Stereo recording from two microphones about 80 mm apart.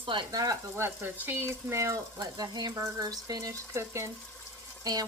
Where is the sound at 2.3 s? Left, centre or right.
Right.